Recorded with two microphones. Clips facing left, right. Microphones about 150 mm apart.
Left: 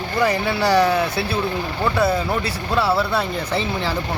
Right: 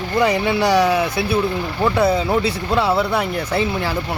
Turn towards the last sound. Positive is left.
turn(degrees=-15)  # may be behind; listen again after turning